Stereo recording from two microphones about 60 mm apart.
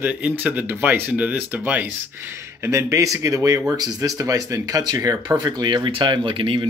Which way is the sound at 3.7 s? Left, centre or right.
Right.